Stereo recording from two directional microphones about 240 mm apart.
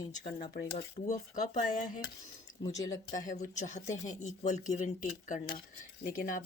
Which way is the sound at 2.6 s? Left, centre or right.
Centre.